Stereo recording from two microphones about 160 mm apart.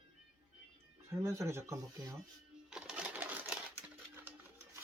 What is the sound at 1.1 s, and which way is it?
Speech, 15° right (ahead or behind).